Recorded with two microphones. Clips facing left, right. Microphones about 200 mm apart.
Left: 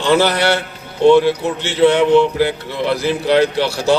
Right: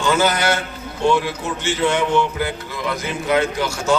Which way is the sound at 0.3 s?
35° left (ahead or behind).